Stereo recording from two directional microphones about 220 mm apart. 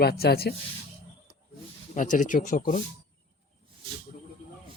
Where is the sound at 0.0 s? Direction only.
45° left (ahead or behind).